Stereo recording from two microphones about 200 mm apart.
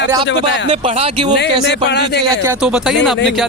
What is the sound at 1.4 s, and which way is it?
Speech, 60° left (ahead or behind).